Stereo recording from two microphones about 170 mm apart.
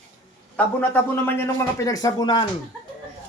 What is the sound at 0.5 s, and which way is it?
Speech, 10° left (ahead or behind).